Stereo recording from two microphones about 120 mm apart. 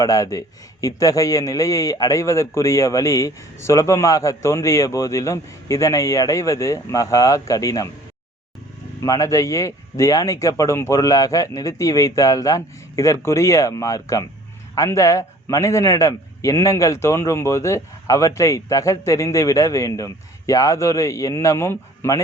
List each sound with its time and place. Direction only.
0.0 s a man's voice: 25° left (ahead or behind)
9.0 s a man's voice: 30° left (ahead or behind)